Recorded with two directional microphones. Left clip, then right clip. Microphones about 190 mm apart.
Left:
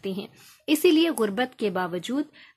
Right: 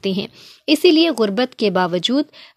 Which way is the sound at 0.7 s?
30° right (ahead or behind).